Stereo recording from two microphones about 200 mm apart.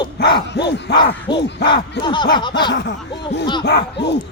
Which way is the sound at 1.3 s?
20° left (ahead or behind).